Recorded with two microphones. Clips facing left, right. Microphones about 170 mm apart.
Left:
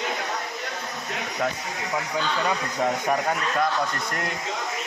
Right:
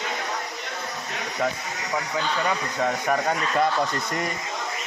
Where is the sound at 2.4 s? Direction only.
5° left (ahead or behind).